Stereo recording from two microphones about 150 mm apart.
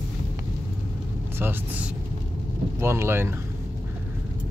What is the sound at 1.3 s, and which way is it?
Speech, 15° right (ahead or behind).